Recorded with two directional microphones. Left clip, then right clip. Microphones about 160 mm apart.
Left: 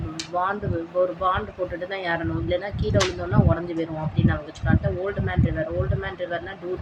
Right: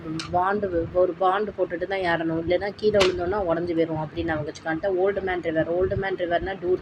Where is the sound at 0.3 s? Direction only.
15° right (ahead or behind).